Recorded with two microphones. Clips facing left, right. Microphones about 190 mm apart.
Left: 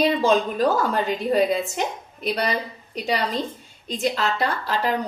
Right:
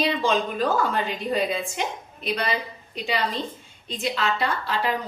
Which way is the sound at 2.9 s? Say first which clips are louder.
Left 3 dB; 40° left (ahead or behind).